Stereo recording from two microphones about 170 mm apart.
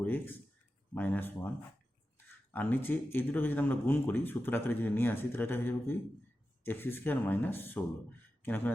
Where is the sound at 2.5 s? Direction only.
10° left (ahead or behind).